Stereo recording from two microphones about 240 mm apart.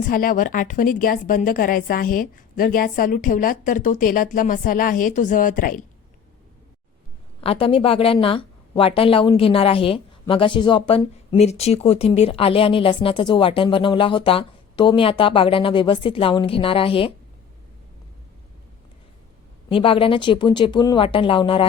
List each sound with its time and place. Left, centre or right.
0.1 s a woman's voice: left
7.4 s a woman's voice: left
19.6 s a woman's voice: left